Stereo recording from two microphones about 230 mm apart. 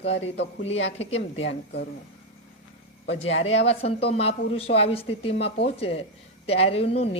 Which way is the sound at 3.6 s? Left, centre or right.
Left.